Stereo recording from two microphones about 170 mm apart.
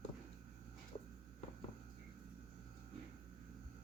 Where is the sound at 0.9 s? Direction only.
25° left (ahead or behind).